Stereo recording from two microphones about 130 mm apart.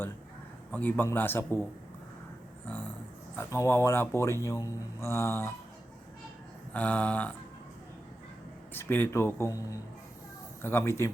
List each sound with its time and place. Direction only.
0.7 s a man's voice: 15° left (ahead or behind)
3.3 s a man's voice: 20° left (ahead or behind)
6.7 s a man's voice: 10° left (ahead or behind)
8.7 s speech: 15° left (ahead or behind)
10.6 s a man's voice: 20° left (ahead or behind)